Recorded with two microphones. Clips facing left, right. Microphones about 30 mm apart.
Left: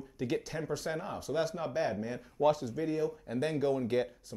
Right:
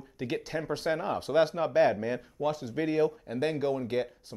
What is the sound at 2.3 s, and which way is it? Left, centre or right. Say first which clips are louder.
Speech: left 6 dB; centre.